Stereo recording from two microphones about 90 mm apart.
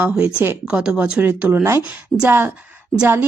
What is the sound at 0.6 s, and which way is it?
Speech, 10° right (ahead or behind).